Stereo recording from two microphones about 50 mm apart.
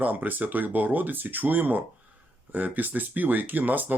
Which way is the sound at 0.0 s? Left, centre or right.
Right.